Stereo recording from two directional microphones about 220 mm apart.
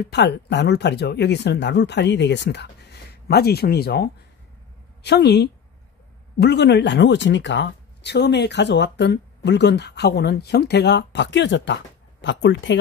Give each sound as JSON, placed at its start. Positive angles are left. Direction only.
{"t": 0.0, "sound": "speech", "side_deg": 50}